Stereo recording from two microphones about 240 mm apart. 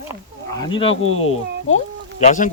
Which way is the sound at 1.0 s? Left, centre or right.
Left.